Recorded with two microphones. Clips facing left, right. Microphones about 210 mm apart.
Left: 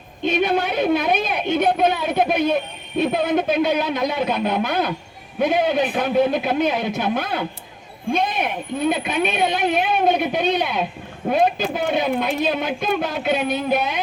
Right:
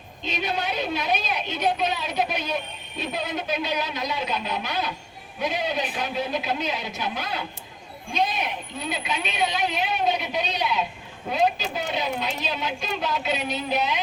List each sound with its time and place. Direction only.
0.3 s speech: 55° left (ahead or behind)